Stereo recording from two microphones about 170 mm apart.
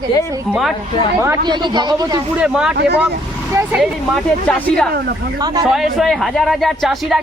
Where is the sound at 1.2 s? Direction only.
20° right (ahead or behind).